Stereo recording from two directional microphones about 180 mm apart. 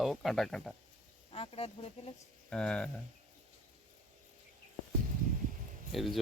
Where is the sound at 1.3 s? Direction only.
30° left (ahead or behind).